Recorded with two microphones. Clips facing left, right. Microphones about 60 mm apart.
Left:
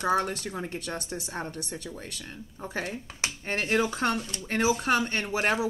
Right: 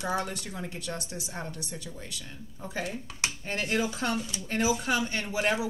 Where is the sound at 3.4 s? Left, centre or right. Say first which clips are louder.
Left 4 dB; left.